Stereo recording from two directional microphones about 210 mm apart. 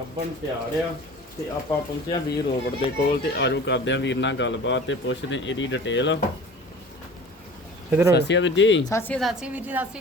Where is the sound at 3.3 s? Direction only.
55° left (ahead or behind).